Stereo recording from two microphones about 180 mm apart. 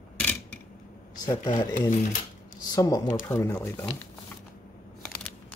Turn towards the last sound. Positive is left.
turn(degrees=15)  # may be behind; listen again after turning